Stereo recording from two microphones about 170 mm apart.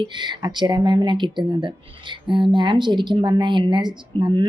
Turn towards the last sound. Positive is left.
turn(degrees=-25)  # may be behind; listen again after turning